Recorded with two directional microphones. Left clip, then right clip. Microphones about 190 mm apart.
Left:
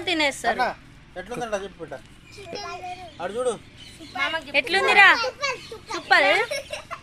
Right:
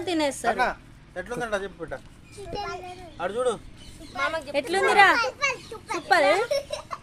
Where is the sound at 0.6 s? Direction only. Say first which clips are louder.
Even; 5° left (ahead or behind).